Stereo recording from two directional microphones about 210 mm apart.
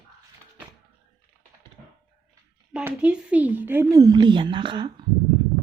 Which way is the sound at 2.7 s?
5° right (ahead or behind).